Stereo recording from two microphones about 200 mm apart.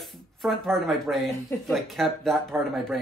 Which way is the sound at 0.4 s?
Centre (ahead or behind).